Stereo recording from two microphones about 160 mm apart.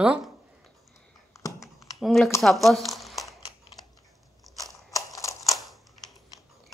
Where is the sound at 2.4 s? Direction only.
Centre (ahead or behind).